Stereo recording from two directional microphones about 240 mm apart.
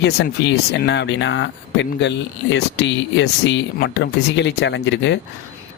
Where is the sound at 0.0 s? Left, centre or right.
Left.